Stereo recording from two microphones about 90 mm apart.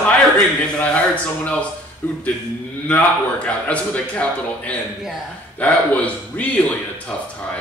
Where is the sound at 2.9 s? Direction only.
15° left (ahead or behind).